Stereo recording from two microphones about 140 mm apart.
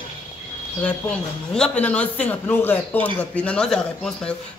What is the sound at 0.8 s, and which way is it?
A man's voice, 5° left (ahead or behind).